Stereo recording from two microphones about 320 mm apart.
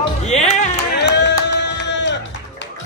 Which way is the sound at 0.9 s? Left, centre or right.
Left.